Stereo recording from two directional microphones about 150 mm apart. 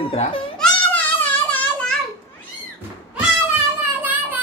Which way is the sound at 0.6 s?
10° left (ahead or behind).